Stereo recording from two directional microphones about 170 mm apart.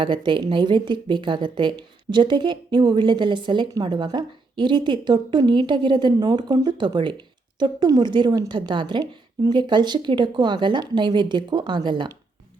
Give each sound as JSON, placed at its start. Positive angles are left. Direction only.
{"t": 0.0, "sound": "a woman's voice", "side_deg": -30}